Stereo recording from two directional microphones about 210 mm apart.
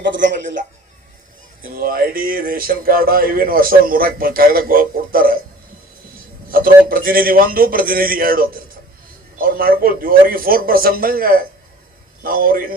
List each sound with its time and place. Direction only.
1.6 s speech: 45° right (ahead or behind)
6.5 s speech: 45° right (ahead or behind)